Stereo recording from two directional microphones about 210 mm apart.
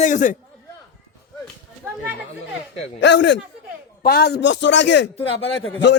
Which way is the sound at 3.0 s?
55° left (ahead or behind).